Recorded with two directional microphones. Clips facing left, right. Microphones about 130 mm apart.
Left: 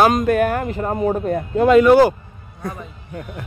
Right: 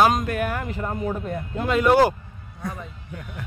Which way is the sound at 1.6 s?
75° left (ahead or behind).